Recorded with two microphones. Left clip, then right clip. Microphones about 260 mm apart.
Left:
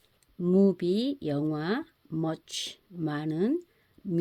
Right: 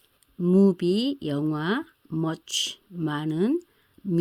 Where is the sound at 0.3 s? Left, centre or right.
Right.